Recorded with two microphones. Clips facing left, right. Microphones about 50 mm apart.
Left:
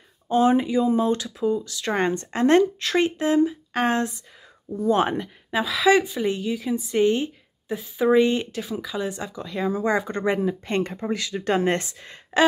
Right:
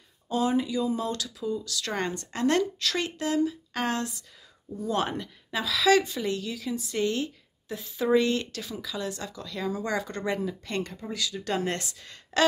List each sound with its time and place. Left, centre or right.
0.3 s a woman's voice: left